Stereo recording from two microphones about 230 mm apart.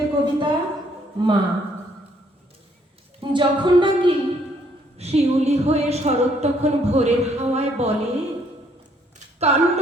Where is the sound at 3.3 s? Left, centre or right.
Centre.